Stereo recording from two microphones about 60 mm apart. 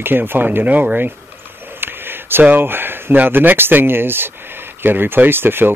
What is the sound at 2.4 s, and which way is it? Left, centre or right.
Speech, right.